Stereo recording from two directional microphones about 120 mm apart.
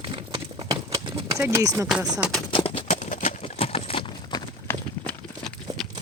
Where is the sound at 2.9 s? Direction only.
90° left.